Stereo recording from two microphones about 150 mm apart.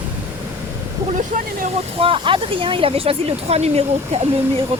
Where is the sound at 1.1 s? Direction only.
65° right (ahead or behind).